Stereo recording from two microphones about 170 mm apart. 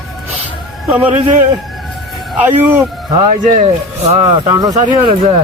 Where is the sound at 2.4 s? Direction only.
10° right (ahead or behind).